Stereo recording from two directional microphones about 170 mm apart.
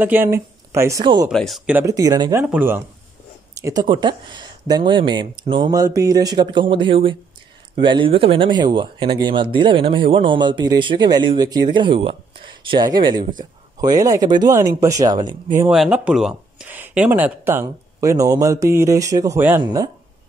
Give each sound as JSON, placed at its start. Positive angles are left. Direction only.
{"t": 0.0, "sound": "a woman's voice", "side_deg": -10}
{"t": 1.3, "sound": "speech", "side_deg": 0}
{"t": 1.7, "sound": "speech", "side_deg": -15}
{"t": 2.4, "sound": "speech", "side_deg": -10}
{"t": 3.5, "sound": "speech", "side_deg": -20}
{"t": 15.7, "sound": "speech", "side_deg": -5}